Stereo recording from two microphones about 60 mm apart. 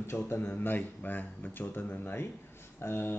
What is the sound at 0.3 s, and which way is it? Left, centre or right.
Speech, left.